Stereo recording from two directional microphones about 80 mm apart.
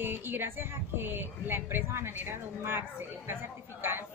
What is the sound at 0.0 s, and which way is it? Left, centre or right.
A woman's voice, right.